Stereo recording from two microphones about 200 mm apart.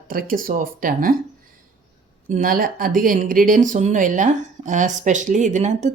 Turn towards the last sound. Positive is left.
turn(degrees=-35)  # may be behind; listen again after turning